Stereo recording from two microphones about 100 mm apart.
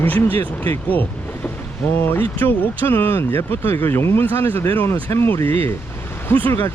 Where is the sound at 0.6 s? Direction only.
15° left (ahead or behind).